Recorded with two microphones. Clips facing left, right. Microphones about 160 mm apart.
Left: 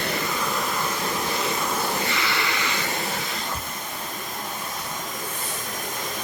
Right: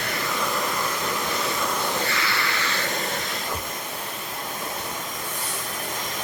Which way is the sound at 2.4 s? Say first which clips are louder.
Left 1 dB; 15° left (ahead or behind).